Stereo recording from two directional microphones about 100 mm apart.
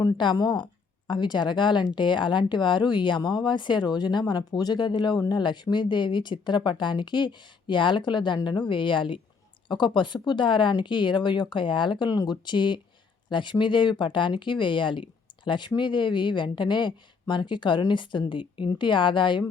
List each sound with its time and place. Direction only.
0.2 s a woman's voice: 50° left (ahead or behind)